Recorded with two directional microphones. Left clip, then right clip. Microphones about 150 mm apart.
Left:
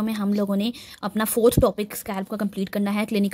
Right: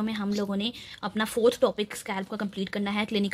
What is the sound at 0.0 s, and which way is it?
Speech, 40° left (ahead or behind).